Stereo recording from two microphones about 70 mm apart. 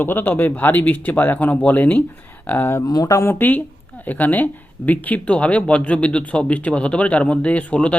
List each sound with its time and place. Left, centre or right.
0.0 s speech: left
2.8 s speech: left
3.2 s speech: left